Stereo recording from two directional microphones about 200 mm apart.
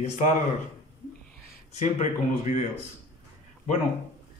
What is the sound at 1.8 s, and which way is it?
Speech, 35° left (ahead or behind).